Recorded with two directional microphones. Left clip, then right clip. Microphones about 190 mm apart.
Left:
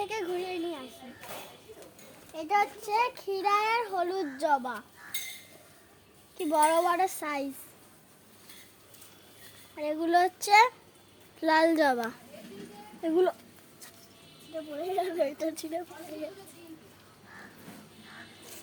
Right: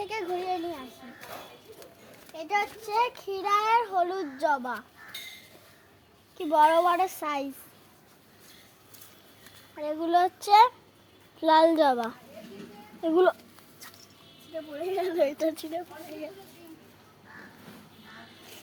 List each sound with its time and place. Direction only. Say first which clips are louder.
0.0 s a sound: right 1 dB; 10° left (ahead or behind)
2.3 s a child's voice: left 1 dB; 20° left (ahead or behind)
5.1 s a sound: left 2 dB; 70° left (ahead or behind)
6.3 s a child's voice: right 4 dB; 15° left (ahead or behind)
9.7 s a child's voice: right 1 dB; 15° left (ahead or behind); by 13.2 s centre (ahead or behind)
15.2 s a woman's voice: right 4 dB; 20° right (ahead or behind)
15.5 s a child's voice: right 1 dB; centre (ahead or behind)